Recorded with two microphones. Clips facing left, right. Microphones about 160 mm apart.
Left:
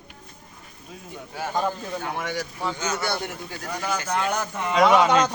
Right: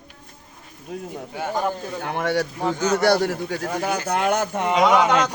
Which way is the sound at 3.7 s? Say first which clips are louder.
Right 1 dB; 55° right (ahead or behind).